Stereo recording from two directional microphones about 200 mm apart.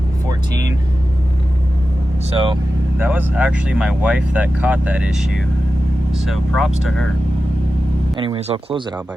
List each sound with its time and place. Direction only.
2.3 s speech: 25° right (ahead or behind)
3.0 s speech: 10° right (ahead or behind)
8.1 s speech: 25° right (ahead or behind)